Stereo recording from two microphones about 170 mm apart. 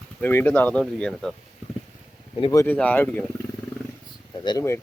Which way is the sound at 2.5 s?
15° left (ahead or behind).